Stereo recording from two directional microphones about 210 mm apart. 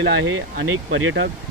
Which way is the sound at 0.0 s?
70° right (ahead or behind).